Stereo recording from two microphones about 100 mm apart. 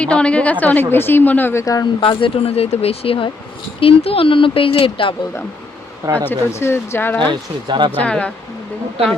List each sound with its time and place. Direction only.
0.0 s a woman's voice: 10° left (ahead or behind)
1.6 s speech: 35° left (ahead or behind)
2.0 s speech: 60° left (ahead or behind)
6.5 s speech: 25° left (ahead or behind)
7.3 s speech: 50° right (ahead or behind)
7.9 s a woman's voice: 10° left (ahead or behind)